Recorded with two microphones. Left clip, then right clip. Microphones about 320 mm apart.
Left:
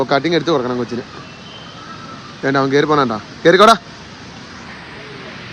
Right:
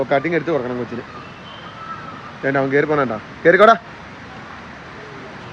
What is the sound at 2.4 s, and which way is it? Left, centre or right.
Speech, centre.